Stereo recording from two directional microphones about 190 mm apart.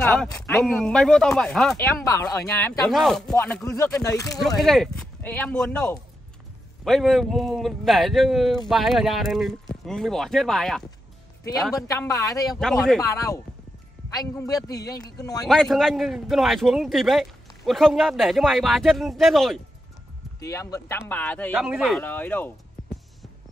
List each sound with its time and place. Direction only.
0.0 s a man's voice: 5° left (ahead or behind)
2.3 s speech: 15° left (ahead or behind)
2.9 s a man's voice: centre (ahead or behind); by 4.4 s 15° left (ahead or behind)
4.6 s a man's voice: centre (ahead or behind)
11.7 s speech: 15° left (ahead or behind)
12.5 s a man's voice: centre (ahead or behind)
14.1 s a man's voice: 20° left (ahead or behind)
15.4 s a man's voice: centre (ahead or behind)
20.3 s speech: 15° left (ahead or behind)
21.5 s a man's voice: 5° right (ahead or behind)
22.0 s speech: 10° left (ahead or behind)